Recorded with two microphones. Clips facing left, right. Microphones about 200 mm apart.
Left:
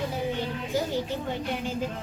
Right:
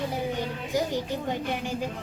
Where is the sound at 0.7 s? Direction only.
15° right (ahead or behind).